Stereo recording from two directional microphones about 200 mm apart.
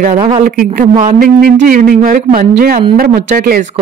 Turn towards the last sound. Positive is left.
turn(degrees=-45)  # may be behind; listen again after turning